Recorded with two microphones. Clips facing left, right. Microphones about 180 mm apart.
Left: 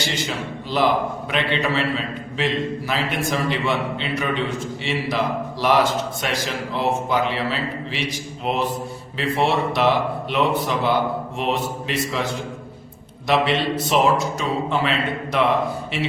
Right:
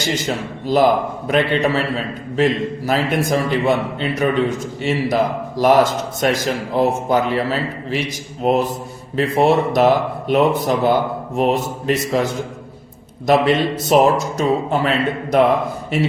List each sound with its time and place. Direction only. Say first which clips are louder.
0.0 s a man's voice: right 5 dB; 45° right (ahead or behind)